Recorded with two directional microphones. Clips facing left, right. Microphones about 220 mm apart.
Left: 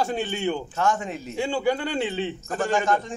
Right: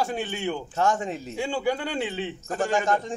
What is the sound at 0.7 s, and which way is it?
Speech, 35° right (ahead or behind).